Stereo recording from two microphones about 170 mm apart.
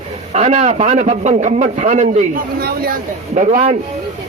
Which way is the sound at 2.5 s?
65° right (ahead or behind).